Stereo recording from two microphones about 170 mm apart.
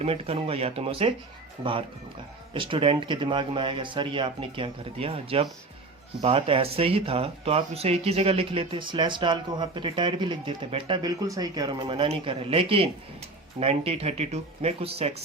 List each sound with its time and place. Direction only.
0.0 s speech: 35° right (ahead or behind)
2.5 s speech: 30° right (ahead or behind)